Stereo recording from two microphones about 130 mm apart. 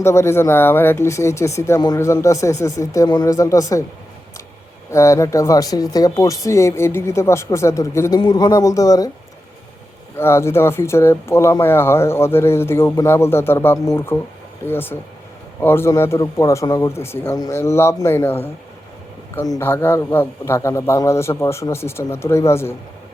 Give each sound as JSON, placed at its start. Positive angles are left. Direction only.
{"t": 0.0, "sound": "speech", "side_deg": 20}
{"t": 4.9, "sound": "speech", "side_deg": 20}
{"t": 10.2, "sound": "speech", "side_deg": 20}